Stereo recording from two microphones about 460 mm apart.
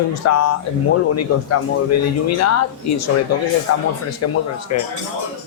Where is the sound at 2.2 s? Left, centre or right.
Left.